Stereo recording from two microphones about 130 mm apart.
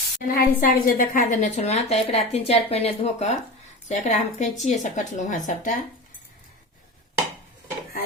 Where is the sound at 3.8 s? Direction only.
65° left (ahead or behind).